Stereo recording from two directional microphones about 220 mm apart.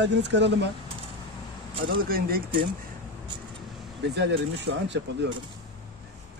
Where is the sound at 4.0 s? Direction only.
50° right (ahead or behind).